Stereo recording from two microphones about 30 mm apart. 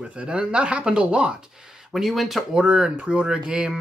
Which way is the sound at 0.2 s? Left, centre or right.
Right.